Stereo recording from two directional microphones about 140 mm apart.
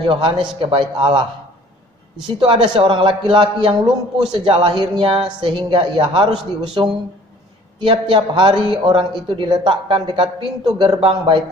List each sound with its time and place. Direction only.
0.1 s a man's voice: 35° right (ahead or behind)
2.2 s a man's voice: 35° right (ahead or behind)